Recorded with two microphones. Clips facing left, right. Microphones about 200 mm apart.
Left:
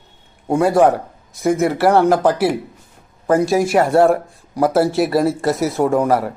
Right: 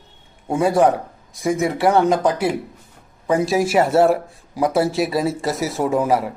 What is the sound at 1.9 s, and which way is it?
Speech, 70° left (ahead or behind).